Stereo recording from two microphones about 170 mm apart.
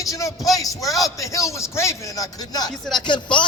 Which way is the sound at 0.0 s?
20° left (ahead or behind).